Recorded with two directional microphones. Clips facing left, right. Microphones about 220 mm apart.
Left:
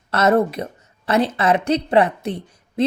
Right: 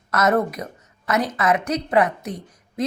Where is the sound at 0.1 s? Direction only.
30° left (ahead or behind).